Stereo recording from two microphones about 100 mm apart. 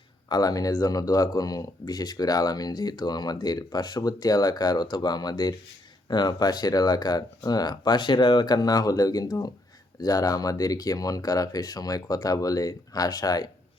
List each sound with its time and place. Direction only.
0.3 s speech: 40° left (ahead or behind)